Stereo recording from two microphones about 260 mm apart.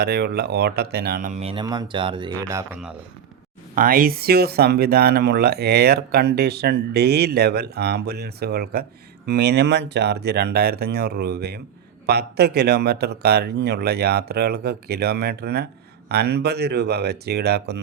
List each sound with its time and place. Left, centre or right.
0.0 s speech: right
1.4 s speech: centre
3.8 s speech: right